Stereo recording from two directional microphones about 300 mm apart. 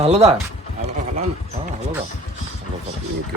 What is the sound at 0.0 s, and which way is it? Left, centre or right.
Speech, right.